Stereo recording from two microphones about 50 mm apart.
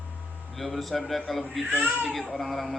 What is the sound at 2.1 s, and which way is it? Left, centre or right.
Speech, centre.